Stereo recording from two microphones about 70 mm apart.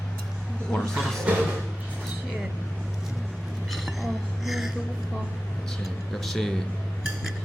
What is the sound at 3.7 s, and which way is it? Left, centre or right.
A woman's voice, centre.